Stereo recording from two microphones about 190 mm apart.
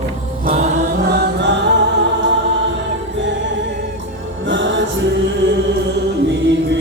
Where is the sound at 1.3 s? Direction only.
65° right (ahead or behind).